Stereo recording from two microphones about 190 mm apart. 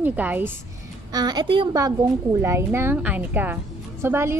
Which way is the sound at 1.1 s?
20° right (ahead or behind).